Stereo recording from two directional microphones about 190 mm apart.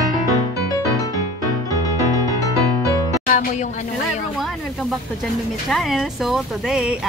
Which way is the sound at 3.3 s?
40° left (ahead or behind).